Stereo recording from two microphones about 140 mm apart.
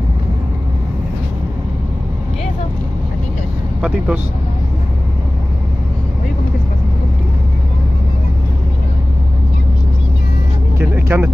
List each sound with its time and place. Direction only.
3.8 s speech: 10° right (ahead or behind)
10.8 s music: 15° right (ahead or behind)